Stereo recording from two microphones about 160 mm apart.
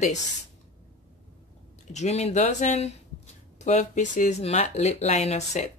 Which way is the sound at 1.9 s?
45° left (ahead or behind).